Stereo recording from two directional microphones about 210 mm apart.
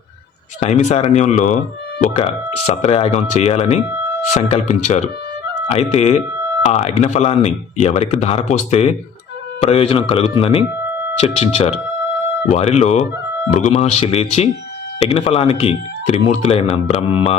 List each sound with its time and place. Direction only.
0.6 s speech: 35° left (ahead or behind)